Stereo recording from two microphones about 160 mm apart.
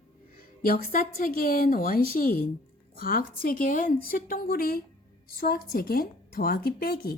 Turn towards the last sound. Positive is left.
turn(degrees=75)  # may be behind; listen again after turning